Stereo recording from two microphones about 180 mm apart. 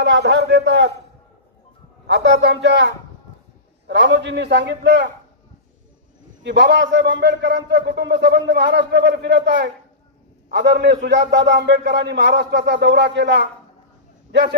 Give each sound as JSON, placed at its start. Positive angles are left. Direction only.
{"t": 0.0, "sound": "a man's voice", "side_deg": -75}
{"t": 2.0, "sound": "a man's voice", "side_deg": -70}
{"t": 3.8, "sound": "a man's voice", "side_deg": -85}
{"t": 6.4, "sound": "a man's voice", "side_deg": -80}